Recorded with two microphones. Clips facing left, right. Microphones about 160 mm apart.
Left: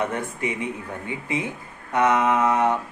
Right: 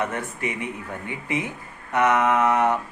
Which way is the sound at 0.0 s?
20° left (ahead or behind).